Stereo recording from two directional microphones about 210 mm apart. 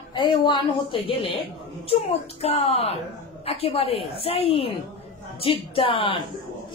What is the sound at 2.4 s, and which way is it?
A woman's voice, 30° left (ahead or behind).